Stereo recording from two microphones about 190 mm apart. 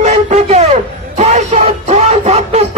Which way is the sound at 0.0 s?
35° right (ahead or behind).